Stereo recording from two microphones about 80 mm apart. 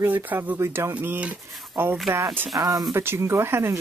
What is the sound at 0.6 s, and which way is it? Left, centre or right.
Speech, right.